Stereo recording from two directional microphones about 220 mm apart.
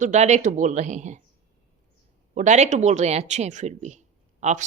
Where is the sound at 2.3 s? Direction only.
35° right (ahead or behind).